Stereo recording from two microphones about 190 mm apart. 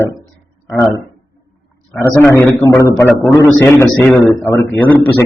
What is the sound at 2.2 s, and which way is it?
A man's voice, 10° left (ahead or behind).